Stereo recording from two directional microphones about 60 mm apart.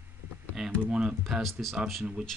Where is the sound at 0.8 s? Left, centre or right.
Centre.